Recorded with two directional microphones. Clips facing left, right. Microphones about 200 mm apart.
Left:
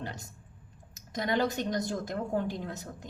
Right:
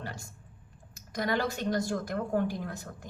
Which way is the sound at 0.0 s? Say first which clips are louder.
Left 1 dB; 20° left (ahead or behind).